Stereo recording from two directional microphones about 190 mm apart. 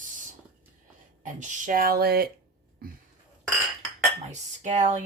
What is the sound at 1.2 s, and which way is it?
Speech, 45° right (ahead or behind).